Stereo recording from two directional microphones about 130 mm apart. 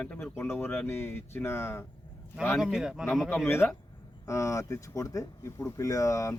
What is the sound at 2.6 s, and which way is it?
Speech, 5° right (ahead or behind).